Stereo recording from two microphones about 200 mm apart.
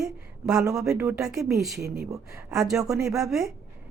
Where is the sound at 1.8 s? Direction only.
50° right (ahead or behind).